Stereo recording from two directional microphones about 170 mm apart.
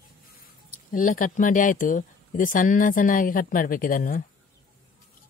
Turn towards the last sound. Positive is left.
turn(degrees=55)  # may be behind; listen again after turning